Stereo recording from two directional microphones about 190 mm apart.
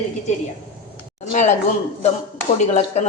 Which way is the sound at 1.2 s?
40° left (ahead or behind).